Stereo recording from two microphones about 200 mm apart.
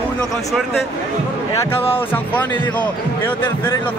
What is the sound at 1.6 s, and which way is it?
Speech, 10° left (ahead or behind).